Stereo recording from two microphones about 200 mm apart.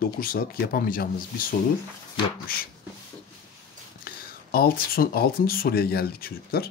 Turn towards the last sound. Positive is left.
turn(degrees=50)  # may be behind; listen again after turning